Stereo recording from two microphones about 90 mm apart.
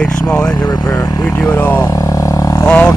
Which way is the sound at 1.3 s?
25° left (ahead or behind).